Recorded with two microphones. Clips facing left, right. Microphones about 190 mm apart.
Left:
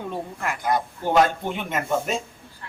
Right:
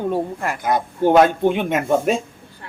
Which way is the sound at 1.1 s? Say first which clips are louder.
Right 5 dB; 60° right (ahead or behind).